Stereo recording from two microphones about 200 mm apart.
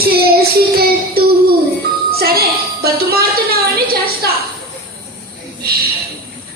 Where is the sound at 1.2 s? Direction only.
50° right (ahead or behind).